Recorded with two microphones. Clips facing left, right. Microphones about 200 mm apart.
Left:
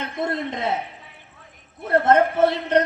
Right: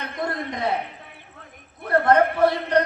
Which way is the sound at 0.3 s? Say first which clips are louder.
Even; 20° left (ahead or behind).